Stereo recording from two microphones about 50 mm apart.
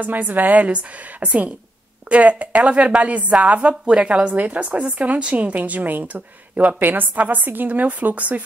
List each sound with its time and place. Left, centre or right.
0.0 s a woman's voice: right